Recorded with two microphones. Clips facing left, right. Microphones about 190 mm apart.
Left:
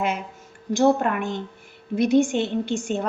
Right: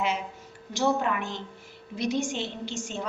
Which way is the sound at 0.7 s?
50° left (ahead or behind).